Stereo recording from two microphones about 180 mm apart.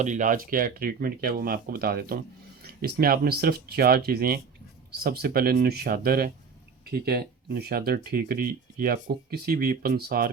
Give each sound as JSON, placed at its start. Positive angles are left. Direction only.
{"t": 0.0, "sound": "speech", "side_deg": -45}